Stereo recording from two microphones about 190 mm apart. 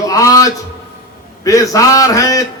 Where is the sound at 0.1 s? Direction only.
15° left (ahead or behind).